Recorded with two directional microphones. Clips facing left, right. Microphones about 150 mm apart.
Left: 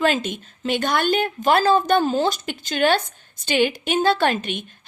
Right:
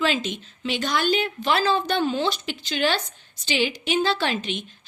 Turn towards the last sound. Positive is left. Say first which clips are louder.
# left 5 dB
turn(degrees=55)  # may be behind; listen again after turning